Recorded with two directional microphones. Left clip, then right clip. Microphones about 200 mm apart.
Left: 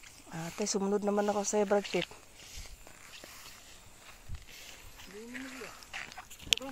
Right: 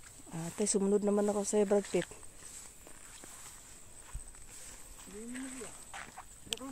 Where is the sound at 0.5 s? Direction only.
30° right (ahead or behind).